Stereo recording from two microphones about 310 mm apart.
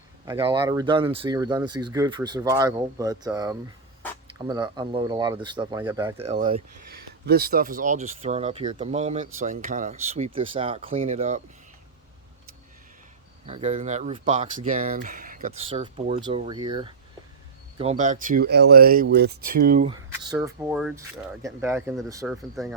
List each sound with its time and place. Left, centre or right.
0.3 s speech: centre
6.2 s speech: right
13.5 s speech: right
19.9 s speech: centre